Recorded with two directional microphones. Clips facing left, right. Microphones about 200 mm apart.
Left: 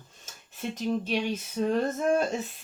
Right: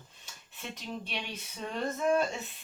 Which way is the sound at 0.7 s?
45° left (ahead or behind).